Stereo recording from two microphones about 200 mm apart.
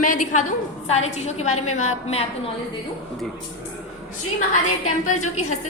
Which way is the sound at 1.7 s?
90° left.